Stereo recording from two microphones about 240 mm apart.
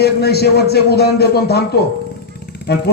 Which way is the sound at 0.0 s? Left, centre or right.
Left.